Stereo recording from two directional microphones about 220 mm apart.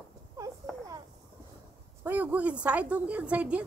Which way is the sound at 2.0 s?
10° right (ahead or behind).